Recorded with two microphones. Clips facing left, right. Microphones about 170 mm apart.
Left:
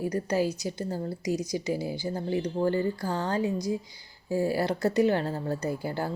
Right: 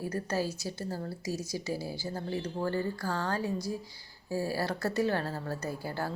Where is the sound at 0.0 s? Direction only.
15° left (ahead or behind).